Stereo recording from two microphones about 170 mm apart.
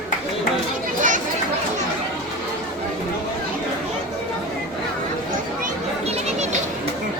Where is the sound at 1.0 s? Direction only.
50° right (ahead or behind).